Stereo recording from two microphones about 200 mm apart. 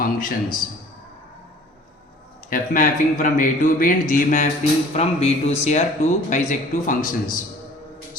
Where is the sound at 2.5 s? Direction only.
40° left (ahead or behind).